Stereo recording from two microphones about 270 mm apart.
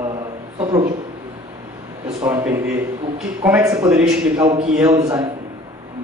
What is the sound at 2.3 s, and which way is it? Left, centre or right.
A man's voice, centre.